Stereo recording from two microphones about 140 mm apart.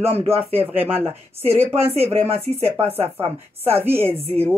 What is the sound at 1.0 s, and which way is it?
Speech, 45° right (ahead or behind).